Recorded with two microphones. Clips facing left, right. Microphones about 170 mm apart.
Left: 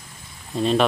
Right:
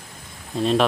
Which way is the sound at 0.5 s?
Centre (ahead or behind).